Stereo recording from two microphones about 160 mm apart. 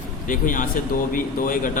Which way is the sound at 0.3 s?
55° left (ahead or behind).